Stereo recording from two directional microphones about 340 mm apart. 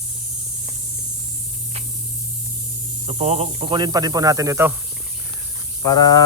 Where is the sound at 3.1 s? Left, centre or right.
Centre.